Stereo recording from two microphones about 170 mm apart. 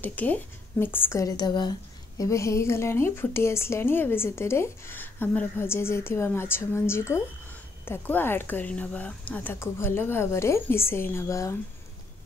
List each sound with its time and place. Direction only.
0.0 s a woman's voice: 10° left (ahead or behind)